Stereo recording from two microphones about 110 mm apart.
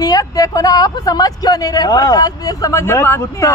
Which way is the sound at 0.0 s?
35° left (ahead or behind).